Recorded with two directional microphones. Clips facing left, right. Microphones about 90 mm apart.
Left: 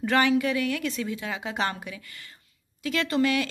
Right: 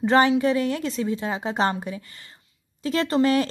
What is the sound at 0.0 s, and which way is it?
A woman's voice, 30° right (ahead or behind).